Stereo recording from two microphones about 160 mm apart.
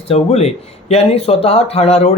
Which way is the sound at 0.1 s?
40° left (ahead or behind).